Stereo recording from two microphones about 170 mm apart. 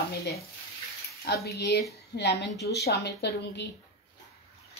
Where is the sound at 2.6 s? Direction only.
70° left (ahead or behind).